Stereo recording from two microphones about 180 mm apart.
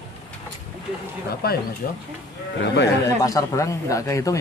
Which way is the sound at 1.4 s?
60° left (ahead or behind).